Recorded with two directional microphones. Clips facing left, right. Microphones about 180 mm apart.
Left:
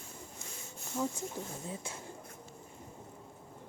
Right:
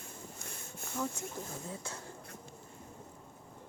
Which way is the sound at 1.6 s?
20° left (ahead or behind).